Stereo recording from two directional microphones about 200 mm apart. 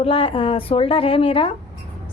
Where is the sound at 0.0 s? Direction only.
25° left (ahead or behind).